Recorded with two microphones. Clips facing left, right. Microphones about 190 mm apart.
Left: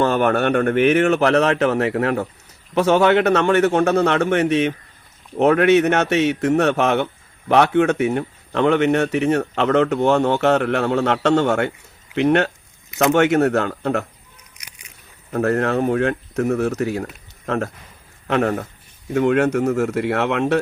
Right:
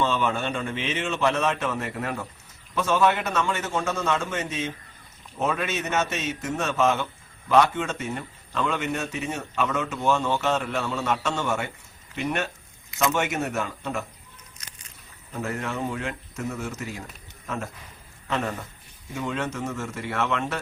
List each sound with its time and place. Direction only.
0.0 s a man's voice: 70° left (ahead or behind)
15.3 s a man's voice: 65° left (ahead or behind)